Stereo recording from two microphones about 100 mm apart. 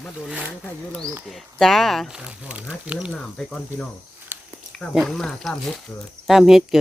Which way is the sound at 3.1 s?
5° left (ahead or behind).